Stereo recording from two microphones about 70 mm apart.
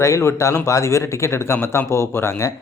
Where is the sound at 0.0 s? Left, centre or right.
Left.